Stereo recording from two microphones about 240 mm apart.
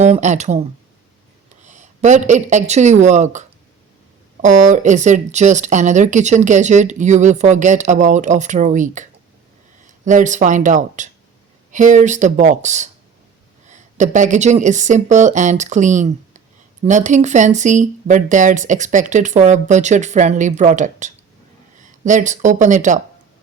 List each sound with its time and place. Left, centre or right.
0.0 s speech: right
1.6 s speech: right